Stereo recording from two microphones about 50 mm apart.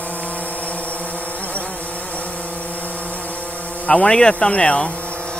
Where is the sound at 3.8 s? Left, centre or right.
Left.